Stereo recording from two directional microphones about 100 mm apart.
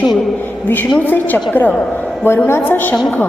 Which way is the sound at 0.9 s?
20° left (ahead or behind).